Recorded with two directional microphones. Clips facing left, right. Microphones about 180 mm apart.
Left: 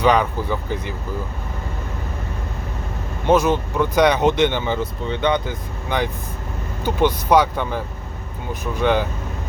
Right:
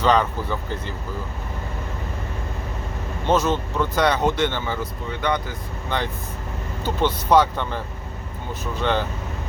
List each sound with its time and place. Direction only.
0.0 s speech: 10° left (ahead or behind)
3.2 s speech: 10° left (ahead or behind)